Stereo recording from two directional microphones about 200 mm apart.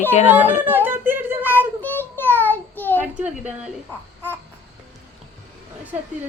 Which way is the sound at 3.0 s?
5° right (ahead or behind).